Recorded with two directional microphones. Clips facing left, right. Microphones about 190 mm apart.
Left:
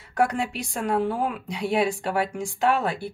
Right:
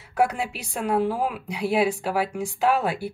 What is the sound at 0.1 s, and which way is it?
Speech, 5° right (ahead or behind).